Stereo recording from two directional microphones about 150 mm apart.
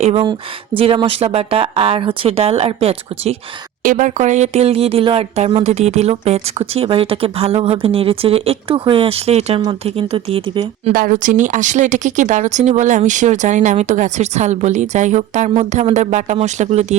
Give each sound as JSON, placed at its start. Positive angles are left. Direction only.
{"t": 0.0, "sound": "speech", "side_deg": -40}
{"t": 3.8, "sound": "speech", "side_deg": -60}
{"t": 10.9, "sound": "speech", "side_deg": -65}